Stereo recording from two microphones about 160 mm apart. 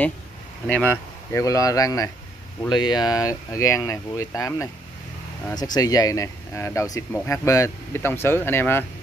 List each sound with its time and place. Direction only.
0.7 s speech: 10° left (ahead or behind)